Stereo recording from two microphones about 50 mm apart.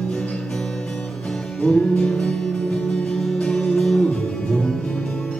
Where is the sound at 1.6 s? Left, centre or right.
Centre.